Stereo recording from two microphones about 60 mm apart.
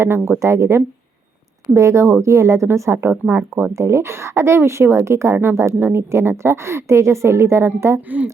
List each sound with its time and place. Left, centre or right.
0.3 s speech: right
3.1 s speech: right
3.8 s speech: right